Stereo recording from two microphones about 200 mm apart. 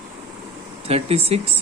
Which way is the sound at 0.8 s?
30° right (ahead or behind).